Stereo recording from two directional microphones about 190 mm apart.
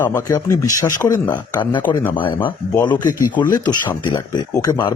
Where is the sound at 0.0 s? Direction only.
15° left (ahead or behind).